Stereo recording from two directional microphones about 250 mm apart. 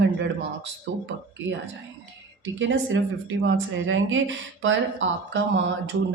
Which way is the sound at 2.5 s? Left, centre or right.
Right.